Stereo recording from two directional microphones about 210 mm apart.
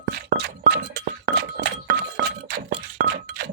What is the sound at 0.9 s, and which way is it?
Chink, 55° right (ahead or behind).